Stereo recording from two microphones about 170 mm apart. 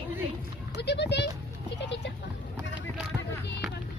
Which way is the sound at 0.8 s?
80° left.